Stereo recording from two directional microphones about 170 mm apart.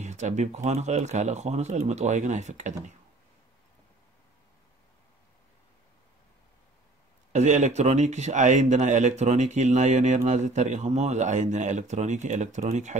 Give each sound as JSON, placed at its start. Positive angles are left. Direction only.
{"t": 0.0, "sound": "speech", "side_deg": -45}
{"t": 7.3, "sound": "speech", "side_deg": -45}